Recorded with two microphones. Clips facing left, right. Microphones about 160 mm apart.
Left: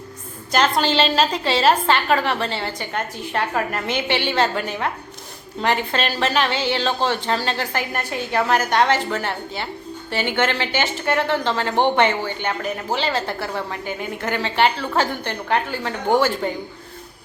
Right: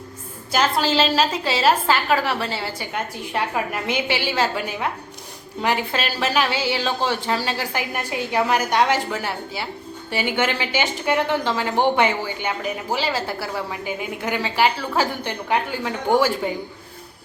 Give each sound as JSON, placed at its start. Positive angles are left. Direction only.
{"t": 0.5, "sound": "a woman's voice", "side_deg": -5}